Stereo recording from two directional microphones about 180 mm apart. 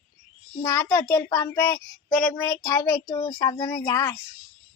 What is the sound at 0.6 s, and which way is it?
A child's voice, 15° left (ahead or behind).